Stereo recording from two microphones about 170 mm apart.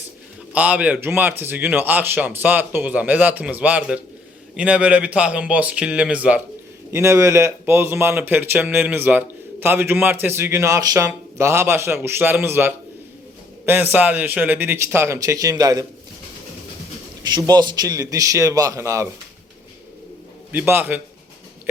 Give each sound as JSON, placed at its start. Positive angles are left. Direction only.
{"t": 0.5, "sound": "a man's voice", "side_deg": -10}
{"t": 17.2, "sound": "a man's voice", "side_deg": -25}
{"t": 20.5, "sound": "a man's voice", "side_deg": -10}